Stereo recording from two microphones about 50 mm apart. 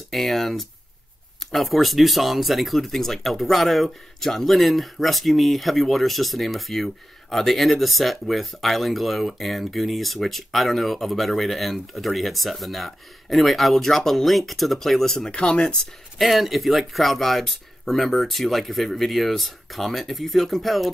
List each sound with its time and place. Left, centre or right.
0.1 s speech: centre
15.3 s speech: centre
16.2 s speech: centre